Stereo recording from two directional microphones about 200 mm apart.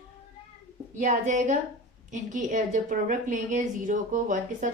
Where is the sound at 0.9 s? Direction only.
40° right (ahead or behind).